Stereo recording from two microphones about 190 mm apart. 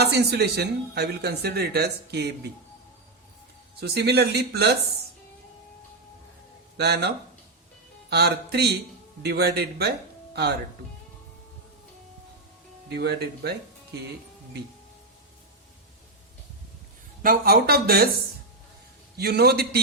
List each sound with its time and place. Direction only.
0.0 s speech: 60° right (ahead or behind)
3.8 s speech: 60° right (ahead or behind)
6.7 s speech: 60° right (ahead or behind)
8.1 s speech: 60° right (ahead or behind)
12.9 s speech: 60° right (ahead or behind)
17.2 s speech: 55° right (ahead or behind)
19.1 s speech: 55° right (ahead or behind)